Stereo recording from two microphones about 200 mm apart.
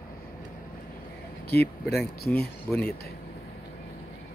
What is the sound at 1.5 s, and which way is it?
Speech, 55° left (ahead or behind).